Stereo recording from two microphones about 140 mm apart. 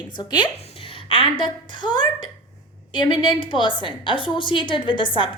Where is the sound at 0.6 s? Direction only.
45° left (ahead or behind).